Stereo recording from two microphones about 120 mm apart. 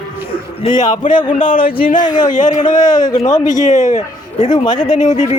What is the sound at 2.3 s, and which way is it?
Speech, 90° left.